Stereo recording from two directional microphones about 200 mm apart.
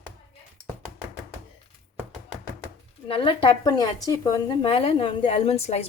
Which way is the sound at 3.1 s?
25° left (ahead or behind).